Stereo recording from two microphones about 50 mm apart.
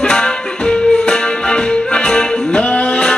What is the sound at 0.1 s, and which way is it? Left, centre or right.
Music, centre.